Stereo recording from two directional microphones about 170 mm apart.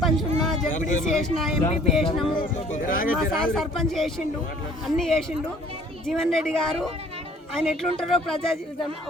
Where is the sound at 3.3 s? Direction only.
Centre (ahead or behind).